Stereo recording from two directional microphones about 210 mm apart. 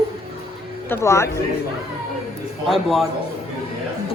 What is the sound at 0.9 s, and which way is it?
Speech, 15° left (ahead or behind).